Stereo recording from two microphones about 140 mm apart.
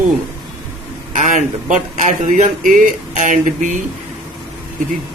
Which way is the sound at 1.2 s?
60° right (ahead or behind).